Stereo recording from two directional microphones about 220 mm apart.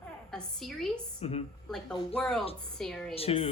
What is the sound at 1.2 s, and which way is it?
Speech, 30° left (ahead or behind).